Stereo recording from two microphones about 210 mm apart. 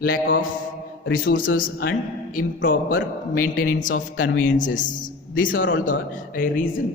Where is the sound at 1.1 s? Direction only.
40° left (ahead or behind).